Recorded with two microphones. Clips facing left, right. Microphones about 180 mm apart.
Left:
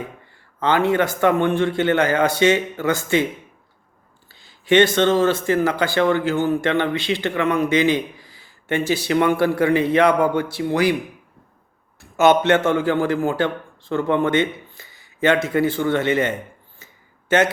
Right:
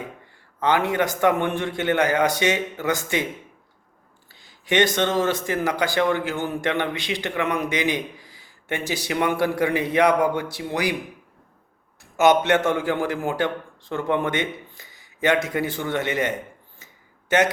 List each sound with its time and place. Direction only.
0.6 s speech: 15° right (ahead or behind)
4.3 s speech: 15° right (ahead or behind)
12.1 s speech: 15° right (ahead or behind)
16.8 s a sound: 15° right (ahead or behind)